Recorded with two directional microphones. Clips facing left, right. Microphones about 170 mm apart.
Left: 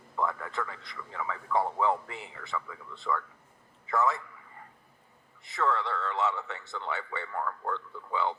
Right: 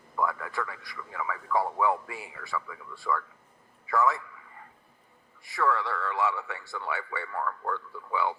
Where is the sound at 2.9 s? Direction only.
20° left (ahead or behind).